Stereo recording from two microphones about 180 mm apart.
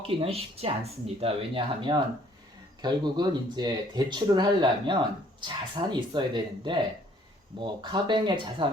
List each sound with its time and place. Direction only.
0.2 s speech: 35° right (ahead or behind)